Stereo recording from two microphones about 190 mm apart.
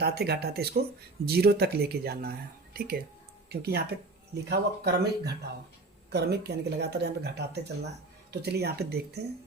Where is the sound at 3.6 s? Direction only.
60° right (ahead or behind).